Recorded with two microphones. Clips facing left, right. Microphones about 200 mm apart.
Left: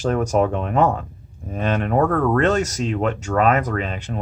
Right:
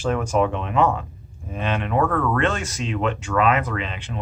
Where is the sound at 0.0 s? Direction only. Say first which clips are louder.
Left 2 dB; 40° left (ahead or behind).